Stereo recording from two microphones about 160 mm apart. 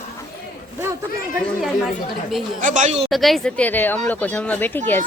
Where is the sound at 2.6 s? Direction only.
50° right (ahead or behind).